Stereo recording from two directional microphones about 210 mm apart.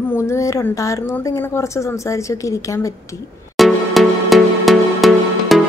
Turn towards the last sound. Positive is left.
turn(degrees=0)  # may be behind; listen again after turning